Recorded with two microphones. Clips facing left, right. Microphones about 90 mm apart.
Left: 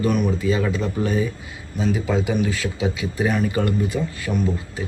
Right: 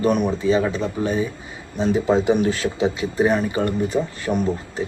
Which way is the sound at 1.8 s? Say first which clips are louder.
Right 4 dB; 35° right (ahead or behind).